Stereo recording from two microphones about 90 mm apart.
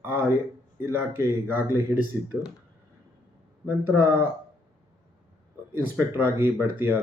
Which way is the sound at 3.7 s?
20° right (ahead or behind).